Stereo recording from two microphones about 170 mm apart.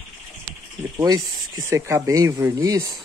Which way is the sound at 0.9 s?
20° right (ahead or behind).